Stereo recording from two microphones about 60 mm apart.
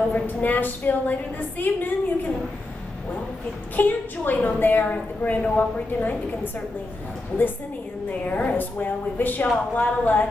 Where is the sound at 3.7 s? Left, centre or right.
Left.